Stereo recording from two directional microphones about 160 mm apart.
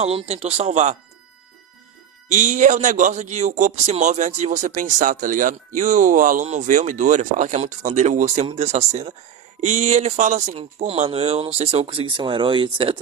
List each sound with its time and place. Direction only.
0.0 s speech: 40° right (ahead or behind)
2.3 s a man's voice: 50° right (ahead or behind); by 13.0 s 30° right (ahead or behind)